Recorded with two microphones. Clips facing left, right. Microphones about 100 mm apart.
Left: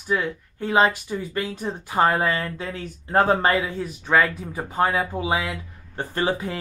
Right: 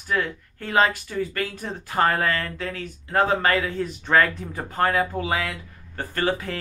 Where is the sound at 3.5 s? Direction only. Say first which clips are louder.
Even; 15° left (ahead or behind).